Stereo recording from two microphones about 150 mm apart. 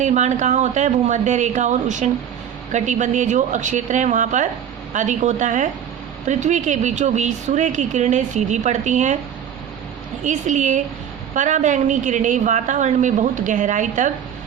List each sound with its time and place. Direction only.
0.0 s a woman's voice: 50° right (ahead or behind)
10.2 s a woman's voice: 55° right (ahead or behind)